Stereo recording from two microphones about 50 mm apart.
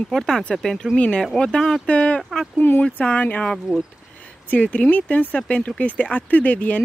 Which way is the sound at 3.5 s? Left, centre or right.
Centre.